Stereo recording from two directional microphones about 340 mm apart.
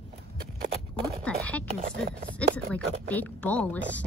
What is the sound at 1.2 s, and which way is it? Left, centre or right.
Speech, centre.